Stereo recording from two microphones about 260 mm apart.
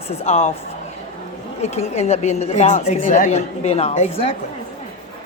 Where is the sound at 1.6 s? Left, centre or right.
Left.